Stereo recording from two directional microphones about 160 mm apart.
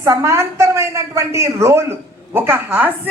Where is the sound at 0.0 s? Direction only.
20° right (ahead or behind).